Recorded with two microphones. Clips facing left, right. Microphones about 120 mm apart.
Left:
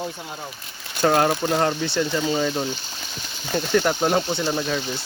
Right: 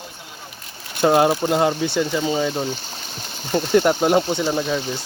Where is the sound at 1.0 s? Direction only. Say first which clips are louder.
Right 3 dB; 15° right (ahead or behind).